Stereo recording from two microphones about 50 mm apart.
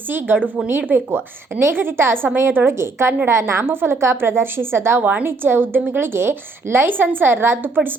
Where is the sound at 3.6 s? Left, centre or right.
Right.